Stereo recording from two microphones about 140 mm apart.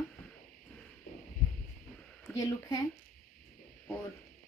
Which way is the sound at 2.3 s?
25° left (ahead or behind).